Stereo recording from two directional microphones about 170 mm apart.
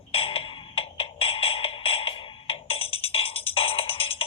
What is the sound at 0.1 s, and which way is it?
Music, 35° left (ahead or behind).